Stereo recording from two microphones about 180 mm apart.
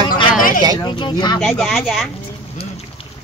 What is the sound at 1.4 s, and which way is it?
Speech, centre (ahead or behind).